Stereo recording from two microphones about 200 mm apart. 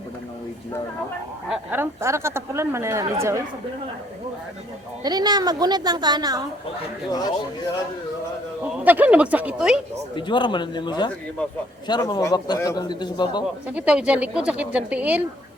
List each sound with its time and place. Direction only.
1.5 s speech: 10° right (ahead or behind)
5.0 s a woman's voice: 20° right (ahead or behind)
8.8 s speech: 10° right (ahead or behind)
10.2 s a man's voice: 25° left (ahead or behind)
13.7 s speech: 5° right (ahead or behind)